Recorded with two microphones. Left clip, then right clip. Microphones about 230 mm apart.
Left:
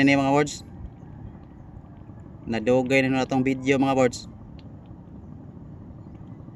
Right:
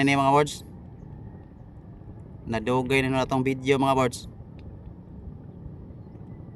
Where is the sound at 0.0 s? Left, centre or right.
Right.